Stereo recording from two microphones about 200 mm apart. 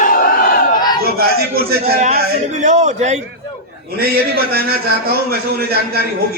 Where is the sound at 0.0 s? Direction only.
45° left (ahead or behind).